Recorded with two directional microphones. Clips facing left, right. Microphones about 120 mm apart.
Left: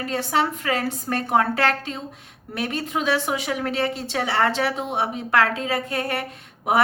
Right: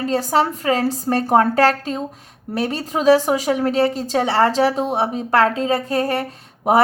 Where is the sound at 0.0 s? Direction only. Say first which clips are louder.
Right 5 dB; 35° right (ahead or behind).